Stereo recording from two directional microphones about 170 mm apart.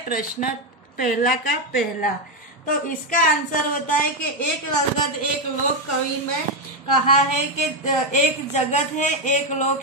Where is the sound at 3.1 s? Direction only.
50° left (ahead or behind).